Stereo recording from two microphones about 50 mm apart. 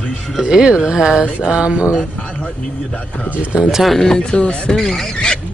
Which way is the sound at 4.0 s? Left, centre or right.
Centre.